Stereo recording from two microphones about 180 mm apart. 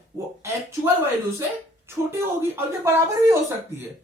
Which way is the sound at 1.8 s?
15° right (ahead or behind).